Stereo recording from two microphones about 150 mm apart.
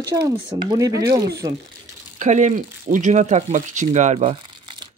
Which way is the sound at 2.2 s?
55° right (ahead or behind).